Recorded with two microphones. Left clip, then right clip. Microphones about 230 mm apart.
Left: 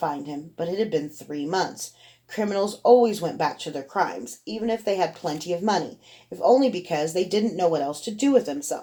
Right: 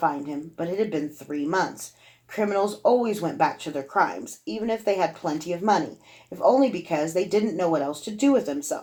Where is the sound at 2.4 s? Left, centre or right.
Left.